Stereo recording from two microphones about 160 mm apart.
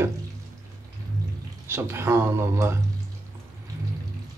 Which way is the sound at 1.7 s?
15° right (ahead or behind).